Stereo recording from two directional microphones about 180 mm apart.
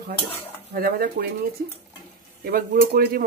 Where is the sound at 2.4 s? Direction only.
55° right (ahead or behind).